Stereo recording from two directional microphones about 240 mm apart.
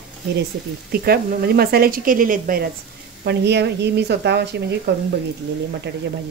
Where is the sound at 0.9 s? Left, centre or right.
Right.